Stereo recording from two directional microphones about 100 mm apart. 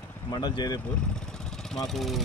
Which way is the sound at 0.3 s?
45° left (ahead or behind).